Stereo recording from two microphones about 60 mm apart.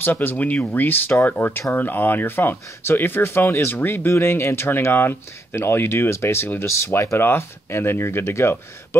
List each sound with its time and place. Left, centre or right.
0.0 s speech: left
7.2 s speech: left